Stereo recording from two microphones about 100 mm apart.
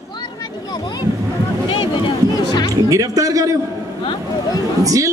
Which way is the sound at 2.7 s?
35° right (ahead or behind).